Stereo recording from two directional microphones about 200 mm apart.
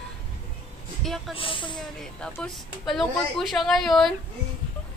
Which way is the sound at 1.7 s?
5° left (ahead or behind).